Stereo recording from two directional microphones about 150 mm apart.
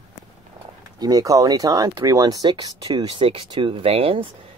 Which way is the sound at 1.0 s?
25° right (ahead or behind).